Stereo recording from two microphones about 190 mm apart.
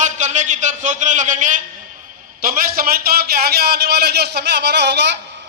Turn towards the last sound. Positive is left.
turn(degrees=-65)  # may be behind; listen again after turning